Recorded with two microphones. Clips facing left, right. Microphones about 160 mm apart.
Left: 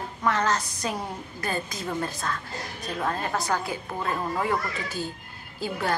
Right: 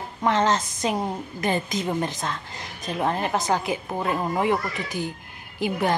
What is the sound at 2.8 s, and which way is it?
A woman's voice, 20° right (ahead or behind).